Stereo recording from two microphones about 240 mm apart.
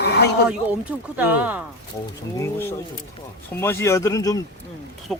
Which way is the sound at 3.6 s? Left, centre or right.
Centre.